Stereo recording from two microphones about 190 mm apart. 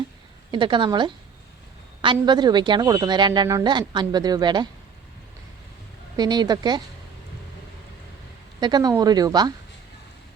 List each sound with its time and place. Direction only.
0.5 s speech: 25° right (ahead or behind)
6.1 s speech: 20° right (ahead or behind)
8.6 s speech: 20° right (ahead or behind)